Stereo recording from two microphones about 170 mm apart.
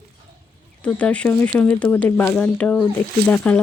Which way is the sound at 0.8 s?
10° left (ahead or behind).